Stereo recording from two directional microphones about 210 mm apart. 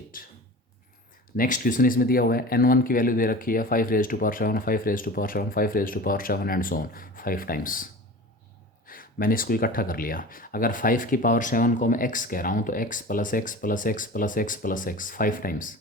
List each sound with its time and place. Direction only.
0.1 s speech: 40° left (ahead or behind)
1.4 s speech: 40° left (ahead or behind)
8.9 s speech: 45° left (ahead or behind)